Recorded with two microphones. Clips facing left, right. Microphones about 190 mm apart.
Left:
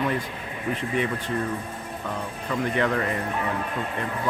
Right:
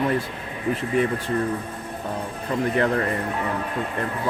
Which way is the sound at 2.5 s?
35° right (ahead or behind).